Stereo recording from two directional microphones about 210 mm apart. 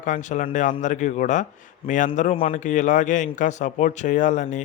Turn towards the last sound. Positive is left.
turn(degrees=35)  # may be behind; listen again after turning